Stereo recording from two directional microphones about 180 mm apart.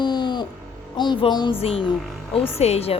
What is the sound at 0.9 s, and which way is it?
A woman's voice, 25° left (ahead or behind).